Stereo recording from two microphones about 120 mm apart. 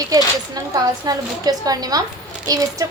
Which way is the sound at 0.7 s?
30° right (ahead or behind).